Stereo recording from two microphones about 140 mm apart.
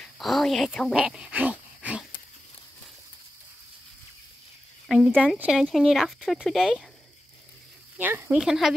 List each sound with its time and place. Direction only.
0.0 s a sound: centre (ahead or behind)
0.9 s speech: 5° right (ahead or behind)
4.8 s speech: 5° right (ahead or behind)
8.0 s speech: 15° right (ahead or behind)
8.4 s speech: 5° right (ahead or behind)